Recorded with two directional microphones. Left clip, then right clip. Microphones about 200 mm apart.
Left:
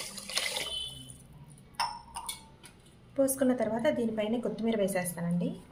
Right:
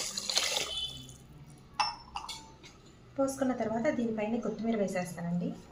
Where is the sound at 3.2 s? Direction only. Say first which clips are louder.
Left 3 dB; 50° left (ahead or behind).